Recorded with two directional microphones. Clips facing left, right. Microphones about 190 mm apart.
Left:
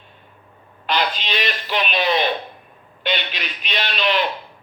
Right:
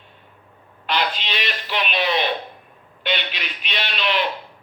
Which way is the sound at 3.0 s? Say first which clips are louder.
Left 1 dB; 40° left (ahead or behind).